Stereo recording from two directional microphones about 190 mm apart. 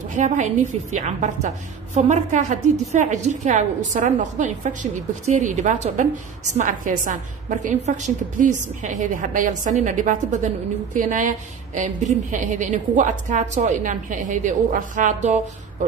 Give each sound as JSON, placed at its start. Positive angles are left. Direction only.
{"t": 0.1, "sound": "a woman's voice", "side_deg": -40}